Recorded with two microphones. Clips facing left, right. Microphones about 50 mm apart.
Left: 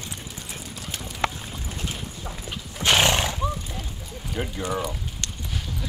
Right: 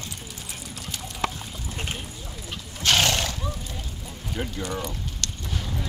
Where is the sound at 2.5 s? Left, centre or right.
Centre.